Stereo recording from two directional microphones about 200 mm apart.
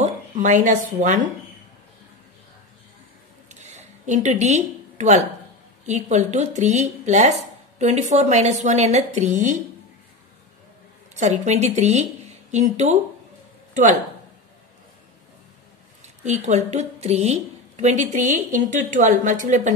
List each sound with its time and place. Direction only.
0.0 s speech: 35° right (ahead or behind)
3.6 s a sound: 35° right (ahead or behind)
5.9 s speech: 35° right (ahead or behind)
11.1 s speech: 35° right (ahead or behind)
16.0 s speech: 35° right (ahead or behind)